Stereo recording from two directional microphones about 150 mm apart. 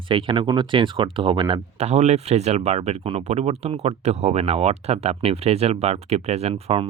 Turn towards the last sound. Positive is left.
turn(degrees=-40)  # may be behind; listen again after turning